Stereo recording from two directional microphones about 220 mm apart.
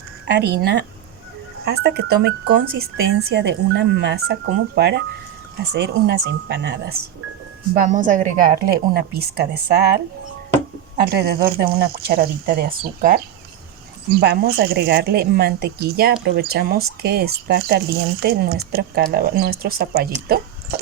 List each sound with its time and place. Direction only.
0.3 s speech: 50° right (ahead or behind)
7.7 s a woman's voice: 35° right (ahead or behind)